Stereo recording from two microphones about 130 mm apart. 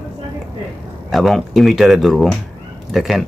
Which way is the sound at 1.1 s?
Centre (ahead or behind).